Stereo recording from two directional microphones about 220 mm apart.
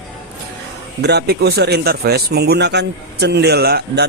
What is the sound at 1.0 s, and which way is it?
Speech, 50° right (ahead or behind).